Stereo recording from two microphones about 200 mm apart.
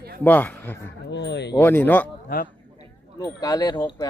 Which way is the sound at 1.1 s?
60° left (ahead or behind).